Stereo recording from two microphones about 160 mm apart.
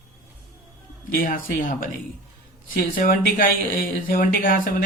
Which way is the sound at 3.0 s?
60° left (ahead or behind).